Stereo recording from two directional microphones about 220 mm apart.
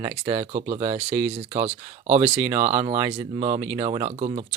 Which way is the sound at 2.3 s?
10° right (ahead or behind).